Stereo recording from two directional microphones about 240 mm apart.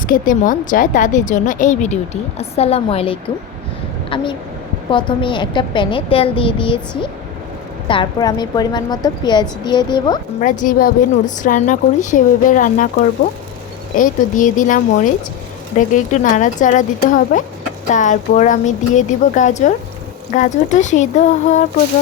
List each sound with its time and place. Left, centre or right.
0.1 s a woman's voice: left; by 10.2 s centre
10.4 s a woman's voice: left